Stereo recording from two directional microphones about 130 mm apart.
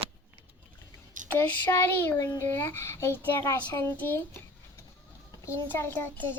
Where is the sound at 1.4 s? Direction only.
15° left (ahead or behind).